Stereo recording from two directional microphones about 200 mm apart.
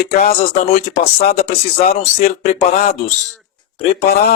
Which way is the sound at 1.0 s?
45° left (ahead or behind).